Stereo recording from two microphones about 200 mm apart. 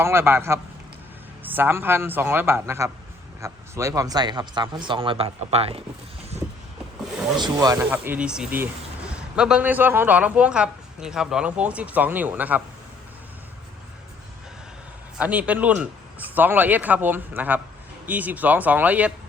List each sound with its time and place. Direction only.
0.0 s speech: 15° right (ahead or behind); by 5.8 s 30° right (ahead or behind)
7.3 s speech: 20° right (ahead or behind)
15.2 s speech: 5° right (ahead or behind)